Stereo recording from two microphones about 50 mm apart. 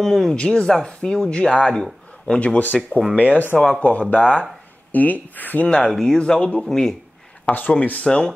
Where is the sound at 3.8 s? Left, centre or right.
Left.